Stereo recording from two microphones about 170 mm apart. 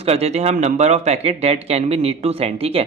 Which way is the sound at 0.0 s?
35° right (ahead or behind).